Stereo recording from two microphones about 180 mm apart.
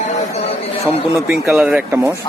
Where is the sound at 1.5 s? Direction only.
5° right (ahead or behind).